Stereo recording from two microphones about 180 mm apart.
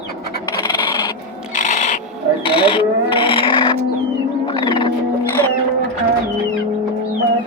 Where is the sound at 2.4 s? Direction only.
30° left (ahead or behind).